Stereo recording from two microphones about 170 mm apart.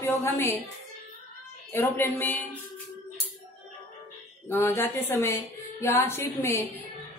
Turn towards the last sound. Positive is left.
turn(degrees=15)  # may be behind; listen again after turning